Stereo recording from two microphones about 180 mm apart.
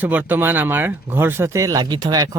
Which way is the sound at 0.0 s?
10° right (ahead or behind).